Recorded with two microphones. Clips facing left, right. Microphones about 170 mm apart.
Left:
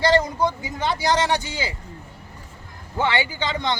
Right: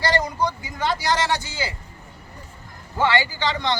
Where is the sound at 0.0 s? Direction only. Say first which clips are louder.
Left 3 dB; 20° left (ahead or behind).